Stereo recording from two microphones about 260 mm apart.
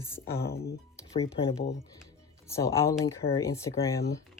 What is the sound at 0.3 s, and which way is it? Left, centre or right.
Speech, left.